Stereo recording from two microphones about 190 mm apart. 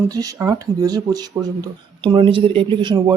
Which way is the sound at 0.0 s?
20° right (ahead or behind).